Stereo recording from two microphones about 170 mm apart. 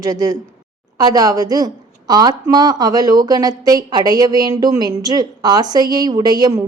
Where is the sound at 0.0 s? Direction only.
20° right (ahead or behind).